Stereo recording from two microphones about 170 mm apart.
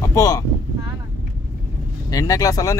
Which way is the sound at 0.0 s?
20° left (ahead or behind).